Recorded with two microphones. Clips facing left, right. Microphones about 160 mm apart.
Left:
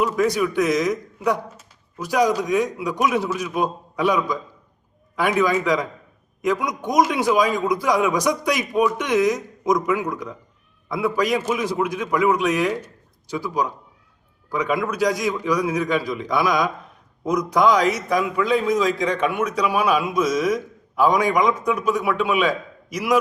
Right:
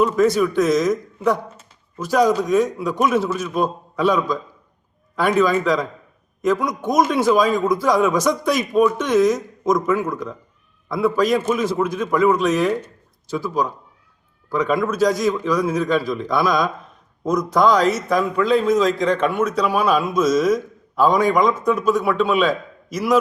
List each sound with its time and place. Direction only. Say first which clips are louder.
0.3 s a man's voice: right 3 dB; 15° left (ahead or behind)